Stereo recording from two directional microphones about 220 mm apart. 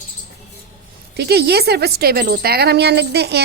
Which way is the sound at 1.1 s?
45° right (ahead or behind).